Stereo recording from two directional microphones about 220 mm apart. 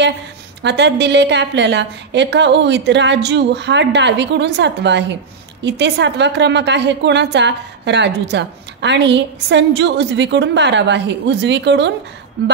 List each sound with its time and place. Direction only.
0.6 s a woman's voice: 50° right (ahead or behind)